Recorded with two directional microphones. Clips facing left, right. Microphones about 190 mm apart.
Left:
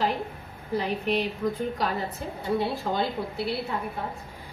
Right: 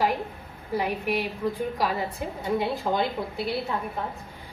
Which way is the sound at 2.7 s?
15° right (ahead or behind).